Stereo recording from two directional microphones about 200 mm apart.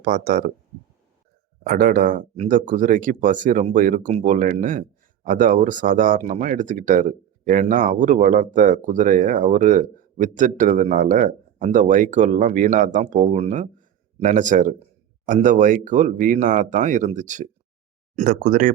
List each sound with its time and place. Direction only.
0.0 s speech: 45° right (ahead or behind)
1.6 s speech: 45° right (ahead or behind)